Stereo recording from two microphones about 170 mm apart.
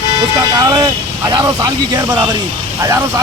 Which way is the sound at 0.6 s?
20° right (ahead or behind).